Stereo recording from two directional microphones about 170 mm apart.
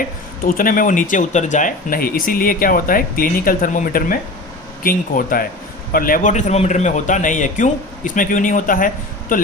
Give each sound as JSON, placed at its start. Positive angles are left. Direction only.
{"t": 0.0, "sound": "a man's voice", "side_deg": 55}